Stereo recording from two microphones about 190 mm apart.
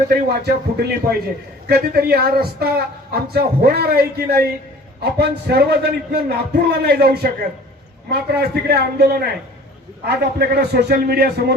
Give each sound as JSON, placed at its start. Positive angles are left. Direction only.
{"t": 0.1, "sound": "a man's voice", "side_deg": -55}